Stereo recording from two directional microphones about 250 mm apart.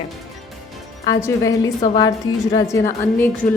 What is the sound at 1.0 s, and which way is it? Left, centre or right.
Speech, centre.